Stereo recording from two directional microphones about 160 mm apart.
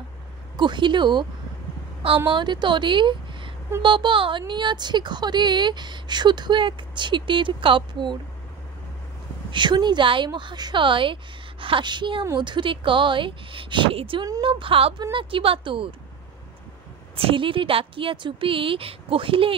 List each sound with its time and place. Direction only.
0.6 s a woman's voice: 30° right (ahead or behind)
9.5 s speech: 30° right (ahead or behind)
17.2 s speech: 35° right (ahead or behind)